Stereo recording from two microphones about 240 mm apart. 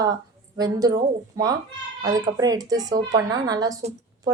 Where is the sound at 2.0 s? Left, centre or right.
Centre.